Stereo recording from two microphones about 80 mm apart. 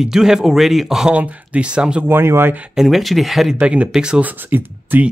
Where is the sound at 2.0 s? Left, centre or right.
Right.